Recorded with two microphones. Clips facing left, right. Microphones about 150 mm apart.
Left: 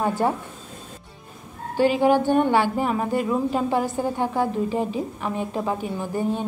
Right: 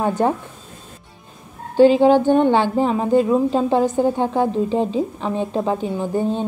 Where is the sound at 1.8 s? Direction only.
20° right (ahead or behind).